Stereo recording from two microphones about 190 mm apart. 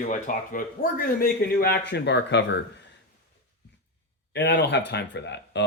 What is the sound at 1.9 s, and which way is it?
Speech, 65° left (ahead or behind).